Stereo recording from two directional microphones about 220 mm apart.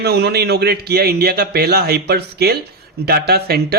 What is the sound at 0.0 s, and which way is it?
Speech, 45° right (ahead or behind).